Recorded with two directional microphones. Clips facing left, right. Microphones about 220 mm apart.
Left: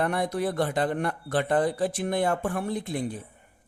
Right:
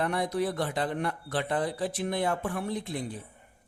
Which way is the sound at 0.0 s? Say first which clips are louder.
Left 2 dB; 55° left (ahead or behind).